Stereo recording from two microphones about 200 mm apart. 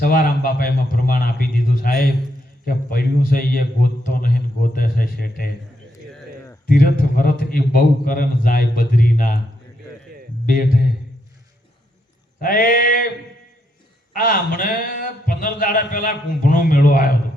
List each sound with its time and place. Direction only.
0.0 s a man's voice: 50° left (ahead or behind)
2.6 s a man's voice: 45° left (ahead or behind)
6.7 s a man's voice: 45° left (ahead or behind)
10.4 s speech: 45° left (ahead or behind)
12.4 s a man's voice: 45° left (ahead or behind)
14.1 s a man's voice: 45° left (ahead or behind)